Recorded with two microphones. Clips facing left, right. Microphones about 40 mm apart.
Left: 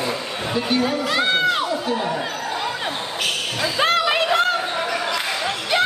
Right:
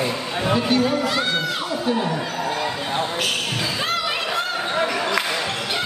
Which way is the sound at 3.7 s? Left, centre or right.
Left.